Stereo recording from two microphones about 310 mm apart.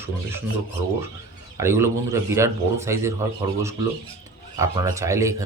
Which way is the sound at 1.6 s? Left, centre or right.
Centre.